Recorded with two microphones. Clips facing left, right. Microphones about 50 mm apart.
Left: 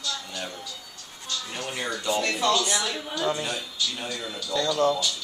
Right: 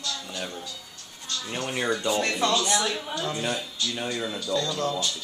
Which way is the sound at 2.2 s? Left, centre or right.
Right.